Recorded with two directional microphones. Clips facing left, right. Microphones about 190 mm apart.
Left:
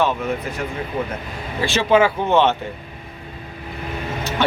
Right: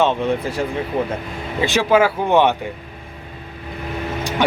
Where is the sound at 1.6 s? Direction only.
10° right (ahead or behind).